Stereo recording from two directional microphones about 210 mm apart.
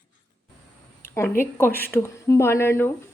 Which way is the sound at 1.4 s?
10° left (ahead or behind).